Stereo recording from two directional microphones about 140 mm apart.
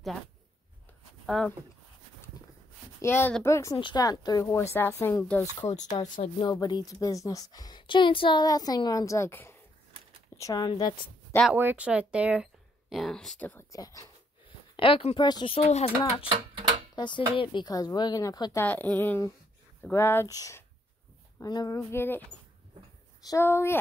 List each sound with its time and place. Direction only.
1.2 s speech: centre (ahead or behind)
3.0 s a woman's voice: 15° left (ahead or behind)
3.7 s a woman's voice: 30° left (ahead or behind)
11.5 s speech: 10° right (ahead or behind); by 13.7 s 10° left (ahead or behind)
13.7 s a woman's voice: 25° left (ahead or behind)
14.8 s speech: 40° left (ahead or behind)
15.5 s speech: 45° left (ahead or behind)
16.3 s a sound: 35° right (ahead or behind)
16.9 s a woman's voice: 35° left (ahead or behind)
18.6 s a woman's voice: 15° left (ahead or behind)
23.3 s speech: 20° left (ahead or behind)